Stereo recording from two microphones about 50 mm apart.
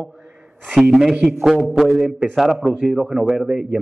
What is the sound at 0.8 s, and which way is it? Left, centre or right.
A man's voice, centre.